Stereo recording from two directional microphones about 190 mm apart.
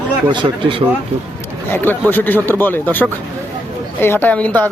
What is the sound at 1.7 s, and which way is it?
A man's voice, 10° left (ahead or behind).